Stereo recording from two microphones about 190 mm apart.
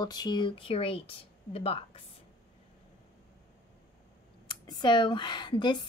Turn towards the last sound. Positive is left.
turn(degrees=25)  # may be behind; listen again after turning